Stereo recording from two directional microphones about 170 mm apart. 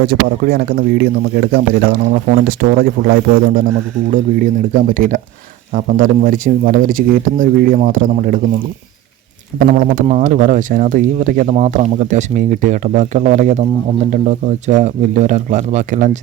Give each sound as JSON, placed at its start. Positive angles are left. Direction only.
{"t": 0.1, "sound": "a man's voice", "side_deg": -65}
{"t": 9.6, "sound": "speech", "side_deg": -55}